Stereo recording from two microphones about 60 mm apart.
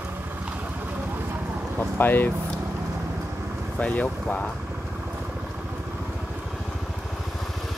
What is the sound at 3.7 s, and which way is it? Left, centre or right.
Speech, left.